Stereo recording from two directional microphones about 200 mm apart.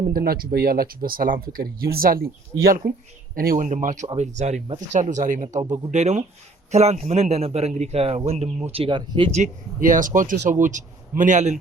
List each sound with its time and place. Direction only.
0.0 s a man's voice: 50° right (ahead or behind); by 9.4 s 25° right (ahead or behind)
9.4 s a man's voice: 40° right (ahead or behind)